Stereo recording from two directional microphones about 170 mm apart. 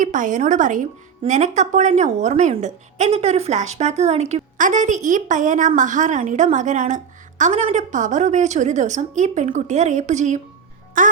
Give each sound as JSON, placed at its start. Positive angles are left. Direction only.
{"t": 0.0, "sound": "speech", "side_deg": -50}